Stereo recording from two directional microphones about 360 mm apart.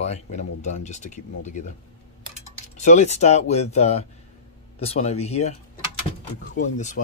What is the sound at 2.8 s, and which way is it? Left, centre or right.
Speech, centre.